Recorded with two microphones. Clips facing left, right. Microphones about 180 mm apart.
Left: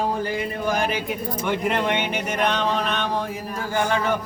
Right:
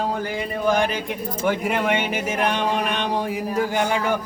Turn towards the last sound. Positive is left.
turn(degrees=-10)  # may be behind; listen again after turning